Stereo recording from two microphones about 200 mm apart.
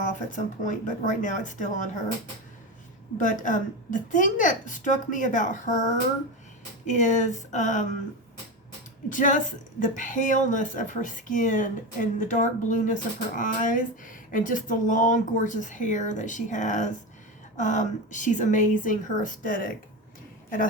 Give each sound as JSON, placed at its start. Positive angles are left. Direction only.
{"t": 0.0, "sound": "speech", "side_deg": 40}
{"t": 3.2, "sound": "speech", "side_deg": 40}
{"t": 9.0, "sound": "speech", "side_deg": 40}